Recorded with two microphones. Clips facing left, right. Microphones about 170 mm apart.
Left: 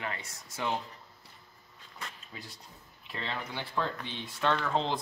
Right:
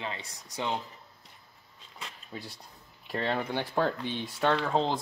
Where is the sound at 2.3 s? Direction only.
30° right (ahead or behind).